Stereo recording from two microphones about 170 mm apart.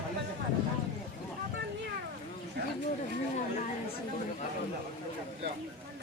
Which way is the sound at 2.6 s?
80° right.